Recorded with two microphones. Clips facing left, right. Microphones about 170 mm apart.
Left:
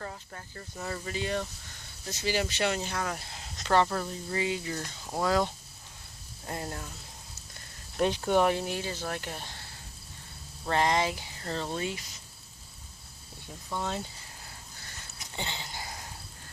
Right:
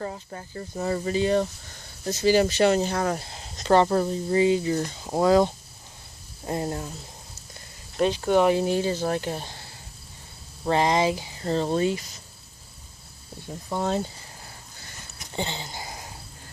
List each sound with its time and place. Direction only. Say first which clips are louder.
0.0 s speech: right 7 dB; 25° right (ahead or behind)
8.2 s speech: right 6 dB; 10° right (ahead or behind)
8.6 s speech: right 10 dB; 35° right (ahead or behind)
10.7 s speech: right 5 dB; 20° right (ahead or behind)
11.6 s speech: right 10 dB; 35° right (ahead or behind)
13.7 s speech: right 8 dB; 45° right (ahead or behind)
15.4 s speech: right 7 dB; 35° right (ahead or behind)
15.7 s a sound: right 4 dB; 20° right (ahead or behind)